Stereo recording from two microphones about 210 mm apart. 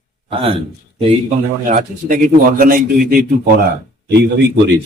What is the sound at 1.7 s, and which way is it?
A man's voice, 40° right (ahead or behind).